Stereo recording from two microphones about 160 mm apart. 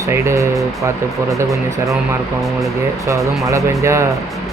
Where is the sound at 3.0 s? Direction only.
20° right (ahead or behind).